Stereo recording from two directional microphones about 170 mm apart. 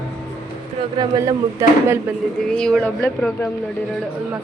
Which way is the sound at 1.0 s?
20° right (ahead or behind).